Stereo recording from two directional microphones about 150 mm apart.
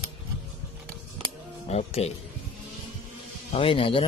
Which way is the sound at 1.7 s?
45° left (ahead or behind).